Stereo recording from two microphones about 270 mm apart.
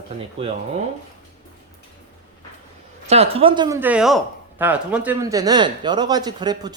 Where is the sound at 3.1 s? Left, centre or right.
Right.